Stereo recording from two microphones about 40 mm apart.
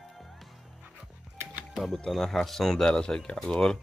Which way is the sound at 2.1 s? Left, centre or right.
Centre.